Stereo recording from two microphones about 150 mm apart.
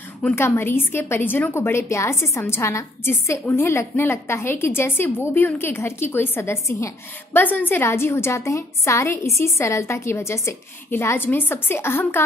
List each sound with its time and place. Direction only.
0.2 s a woman's voice: 15° left (ahead or behind)